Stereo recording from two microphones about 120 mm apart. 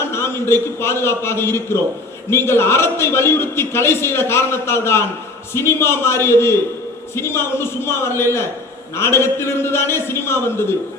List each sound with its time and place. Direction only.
0.0 s a man's voice: 20° left (ahead or behind)